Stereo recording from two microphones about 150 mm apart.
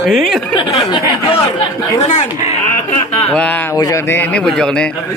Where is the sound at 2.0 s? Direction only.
50° left (ahead or behind).